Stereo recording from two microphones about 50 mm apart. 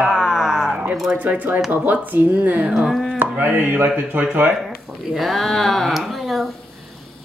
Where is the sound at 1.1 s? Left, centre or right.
Right.